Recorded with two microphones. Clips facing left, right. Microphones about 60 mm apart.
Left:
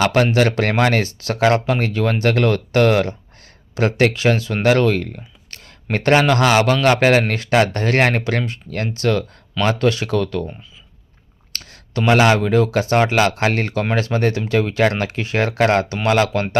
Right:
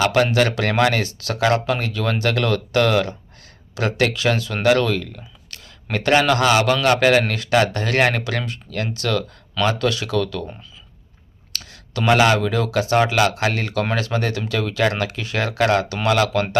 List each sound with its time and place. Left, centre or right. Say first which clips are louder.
0.0 s speech: left 2 dB; left
11.5 s speech: left 3 dB; left